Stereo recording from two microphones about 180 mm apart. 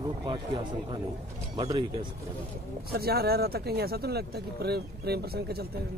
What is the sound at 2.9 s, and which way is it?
Speech, 60° right (ahead or behind).